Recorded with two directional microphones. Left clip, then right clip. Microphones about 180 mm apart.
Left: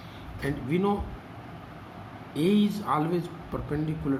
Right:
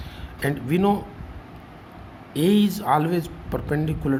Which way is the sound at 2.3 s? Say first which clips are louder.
Right 5 dB; 65° right (ahead or behind).